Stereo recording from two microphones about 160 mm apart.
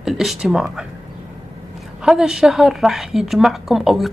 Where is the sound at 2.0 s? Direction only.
5° right (ahead or behind).